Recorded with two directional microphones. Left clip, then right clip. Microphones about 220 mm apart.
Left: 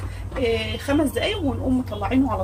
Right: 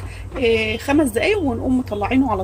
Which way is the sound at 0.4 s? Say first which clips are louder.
Right 6 dB; 35° right (ahead or behind).